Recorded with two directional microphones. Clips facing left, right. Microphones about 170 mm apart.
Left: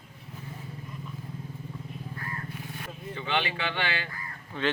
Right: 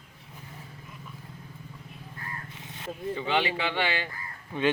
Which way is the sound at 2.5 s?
20° right (ahead or behind).